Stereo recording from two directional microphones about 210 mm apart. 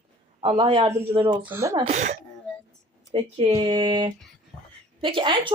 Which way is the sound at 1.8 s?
35° right (ahead or behind).